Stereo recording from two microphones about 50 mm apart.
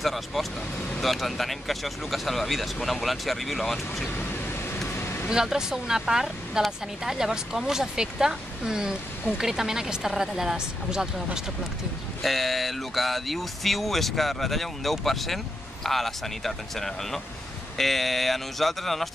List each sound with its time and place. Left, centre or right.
0.0 s speech: centre
4.9 s vehicle: left
5.3 s speech: centre
12.2 s speech: centre